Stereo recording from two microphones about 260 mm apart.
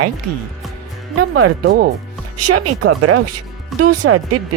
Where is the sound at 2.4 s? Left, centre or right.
Right.